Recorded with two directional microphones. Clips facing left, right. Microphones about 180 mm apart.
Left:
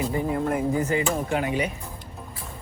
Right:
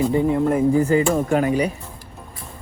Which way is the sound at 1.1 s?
55° right (ahead or behind).